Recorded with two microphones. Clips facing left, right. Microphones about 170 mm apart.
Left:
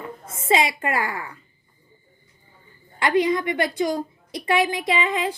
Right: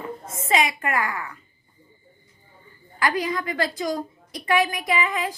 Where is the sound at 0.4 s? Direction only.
25° left (ahead or behind).